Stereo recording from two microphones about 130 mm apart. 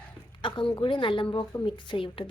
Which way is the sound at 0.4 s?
40° left (ahead or behind).